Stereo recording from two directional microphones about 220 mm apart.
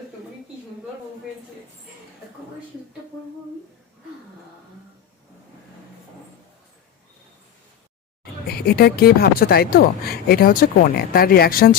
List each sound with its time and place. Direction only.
8.2 s speech: 45° left (ahead or behind)